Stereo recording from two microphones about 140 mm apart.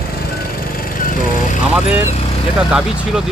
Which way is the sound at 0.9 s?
75° left (ahead or behind).